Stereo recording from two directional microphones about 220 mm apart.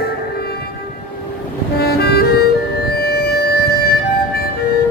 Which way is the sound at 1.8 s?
45° left (ahead or behind).